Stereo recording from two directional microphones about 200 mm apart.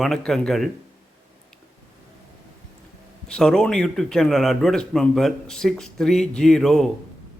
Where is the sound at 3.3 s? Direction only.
5° left (ahead or behind).